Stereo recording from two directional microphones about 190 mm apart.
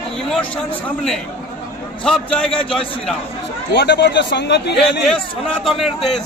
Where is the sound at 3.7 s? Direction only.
60° left (ahead or behind).